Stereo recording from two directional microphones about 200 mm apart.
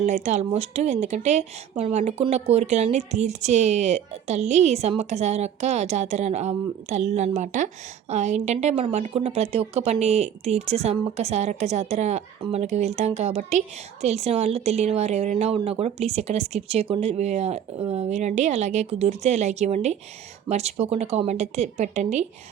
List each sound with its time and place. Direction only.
0.0 s a woman's voice: 35° right (ahead or behind)